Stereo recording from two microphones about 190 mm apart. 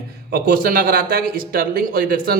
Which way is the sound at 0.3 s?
55° right (ahead or behind).